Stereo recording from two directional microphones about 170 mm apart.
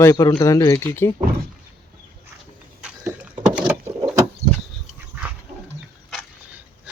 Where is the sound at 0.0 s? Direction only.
20° left (ahead or behind).